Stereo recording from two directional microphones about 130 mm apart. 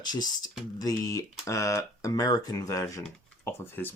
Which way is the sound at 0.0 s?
30° left (ahead or behind).